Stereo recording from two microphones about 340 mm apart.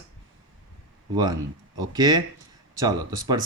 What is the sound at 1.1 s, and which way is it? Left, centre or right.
Speech, centre.